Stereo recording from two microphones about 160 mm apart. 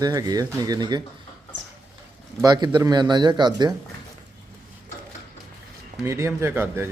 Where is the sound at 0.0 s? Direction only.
25° right (ahead or behind).